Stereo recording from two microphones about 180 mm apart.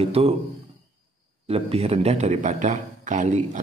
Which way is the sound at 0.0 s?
35° right (ahead or behind).